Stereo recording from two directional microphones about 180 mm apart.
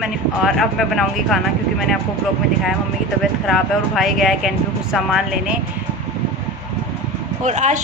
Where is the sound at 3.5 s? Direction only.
Centre (ahead or behind).